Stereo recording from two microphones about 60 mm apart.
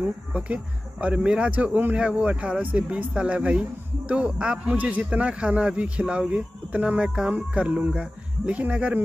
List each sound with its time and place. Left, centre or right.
0.0 s a man's voice: right
2.0 s a man's voice: centre